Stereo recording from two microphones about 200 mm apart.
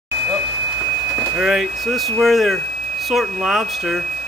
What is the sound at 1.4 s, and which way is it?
Speech, 5° right (ahead or behind).